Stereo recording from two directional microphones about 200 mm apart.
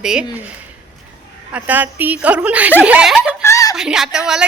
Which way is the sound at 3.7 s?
5° right (ahead or behind).